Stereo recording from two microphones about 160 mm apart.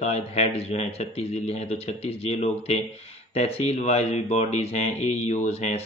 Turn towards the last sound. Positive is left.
turn(degrees=40)  # may be behind; listen again after turning